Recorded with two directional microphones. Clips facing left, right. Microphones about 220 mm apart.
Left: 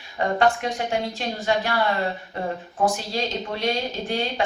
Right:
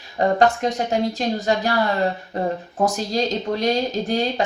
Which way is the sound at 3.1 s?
40° right (ahead or behind).